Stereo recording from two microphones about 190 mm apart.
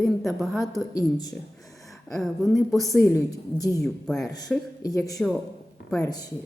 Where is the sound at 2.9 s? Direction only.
15° left (ahead or behind).